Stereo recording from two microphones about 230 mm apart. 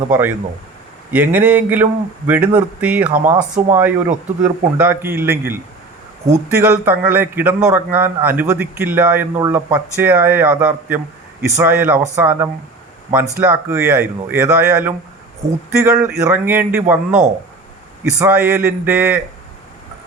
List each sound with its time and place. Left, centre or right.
0.1 s a man's voice: centre
6.7 s a man's voice: centre